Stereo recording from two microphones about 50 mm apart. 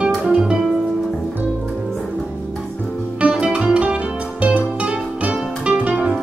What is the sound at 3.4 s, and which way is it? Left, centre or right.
Music, right.